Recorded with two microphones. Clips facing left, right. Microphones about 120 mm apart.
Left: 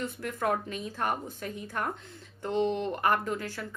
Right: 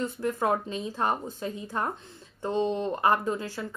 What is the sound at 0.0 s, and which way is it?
Speech, 25° right (ahead or behind).